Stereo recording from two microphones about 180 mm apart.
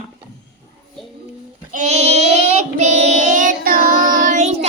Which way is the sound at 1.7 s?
40° right (ahead or behind).